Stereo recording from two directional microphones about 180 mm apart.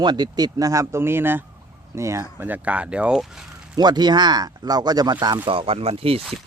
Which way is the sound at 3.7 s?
25° right (ahead or behind).